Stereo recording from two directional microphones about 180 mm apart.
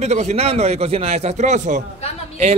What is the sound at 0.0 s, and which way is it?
A man's voice, 40° right (ahead or behind).